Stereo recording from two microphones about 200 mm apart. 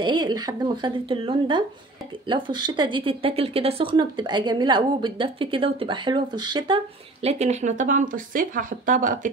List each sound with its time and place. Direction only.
0.0 s speech: 20° right (ahead or behind); by 9.3 s 40° right (ahead or behind)